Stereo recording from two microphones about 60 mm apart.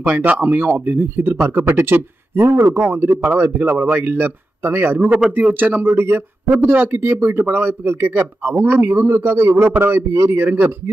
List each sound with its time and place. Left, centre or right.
0.0 s speech: right
10.1 s speech: right
10.4 s speech: right